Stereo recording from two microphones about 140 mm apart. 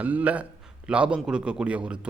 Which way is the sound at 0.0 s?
10° right (ahead or behind).